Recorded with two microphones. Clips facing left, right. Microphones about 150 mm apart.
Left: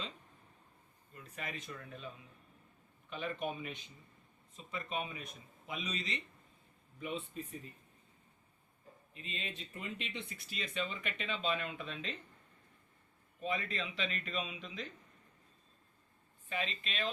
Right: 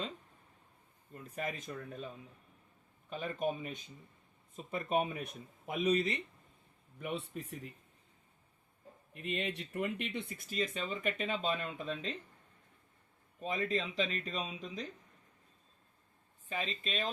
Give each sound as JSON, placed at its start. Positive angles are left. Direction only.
{"t": 1.1, "sound": "speech", "side_deg": -45}
{"t": 3.1, "sound": "speech", "side_deg": -40}
{"t": 7.0, "sound": "speech", "side_deg": -70}
{"t": 9.1, "sound": "speech", "side_deg": -65}
{"t": 13.4, "sound": "speech", "side_deg": -40}
{"t": 16.5, "sound": "speech", "side_deg": -40}